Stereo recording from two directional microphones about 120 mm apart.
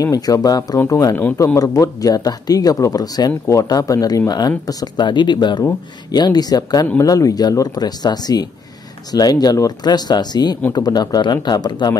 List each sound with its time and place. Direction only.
0.0 s speech: 30° left (ahead or behind)